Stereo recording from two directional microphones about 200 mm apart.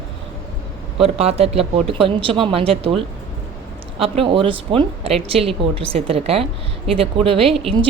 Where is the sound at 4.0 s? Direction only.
25° right (ahead or behind).